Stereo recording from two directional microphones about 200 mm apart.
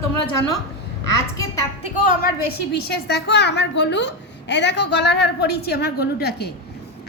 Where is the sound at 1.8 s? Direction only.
40° left (ahead or behind).